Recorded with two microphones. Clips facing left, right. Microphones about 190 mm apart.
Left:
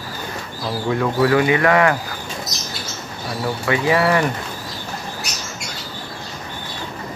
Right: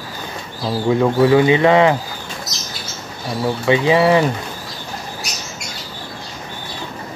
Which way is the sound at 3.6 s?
20° right (ahead or behind).